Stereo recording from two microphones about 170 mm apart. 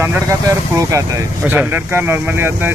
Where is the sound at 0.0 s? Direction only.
15° right (ahead or behind).